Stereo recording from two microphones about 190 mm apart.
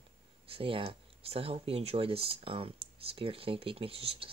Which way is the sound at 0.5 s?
30° right (ahead or behind).